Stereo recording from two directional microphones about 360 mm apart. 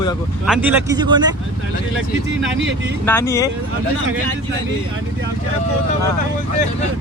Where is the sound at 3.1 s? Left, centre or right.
Centre.